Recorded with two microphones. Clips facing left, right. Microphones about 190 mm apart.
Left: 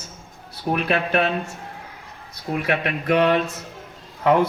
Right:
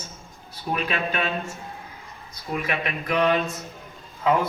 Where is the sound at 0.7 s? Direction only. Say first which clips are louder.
Left 5 dB; 60° left (ahead or behind).